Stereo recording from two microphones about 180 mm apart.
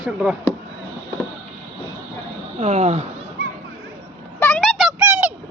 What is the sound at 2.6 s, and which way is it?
Speech, 40° right (ahead or behind).